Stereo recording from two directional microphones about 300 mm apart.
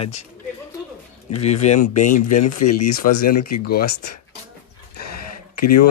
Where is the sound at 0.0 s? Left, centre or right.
Left.